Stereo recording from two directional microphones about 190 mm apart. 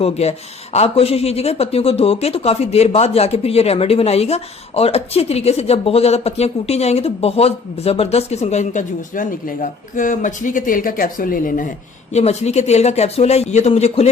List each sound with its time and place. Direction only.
0.0 s speech: 35° left (ahead or behind)
12.1 s speech: 35° left (ahead or behind)